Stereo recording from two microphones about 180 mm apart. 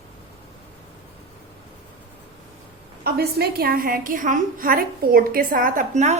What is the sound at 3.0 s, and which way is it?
A woman's voice, 60° right (ahead or behind).